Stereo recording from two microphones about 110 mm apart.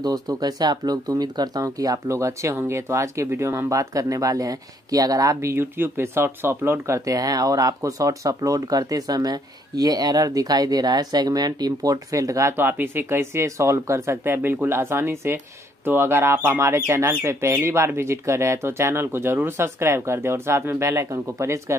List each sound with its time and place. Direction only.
0.0 s speech: 35° right (ahead or behind); by 7.0 s 20° right (ahead or behind)
7.1 s speech: 35° right (ahead or behind)